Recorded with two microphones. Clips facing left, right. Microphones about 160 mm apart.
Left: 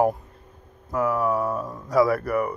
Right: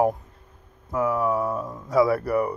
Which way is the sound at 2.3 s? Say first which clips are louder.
Right 1 dB; 30° right (ahead or behind).